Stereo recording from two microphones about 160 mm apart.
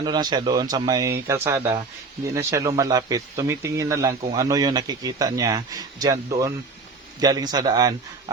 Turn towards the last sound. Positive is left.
turn(degrees=-25)  # may be behind; listen again after turning